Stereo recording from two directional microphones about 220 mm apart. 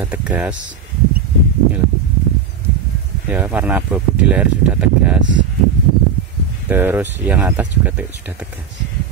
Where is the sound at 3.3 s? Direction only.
10° right (ahead or behind).